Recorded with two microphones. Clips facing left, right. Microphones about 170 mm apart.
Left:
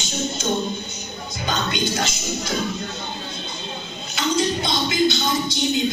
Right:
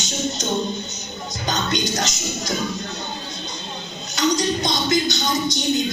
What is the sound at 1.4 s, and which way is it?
Speech, 40° right (ahead or behind).